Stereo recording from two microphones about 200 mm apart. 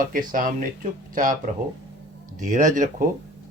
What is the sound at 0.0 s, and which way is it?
Speech, 45° right (ahead or behind).